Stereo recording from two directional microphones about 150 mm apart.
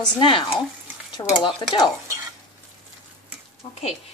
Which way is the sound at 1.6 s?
30° left (ahead or behind).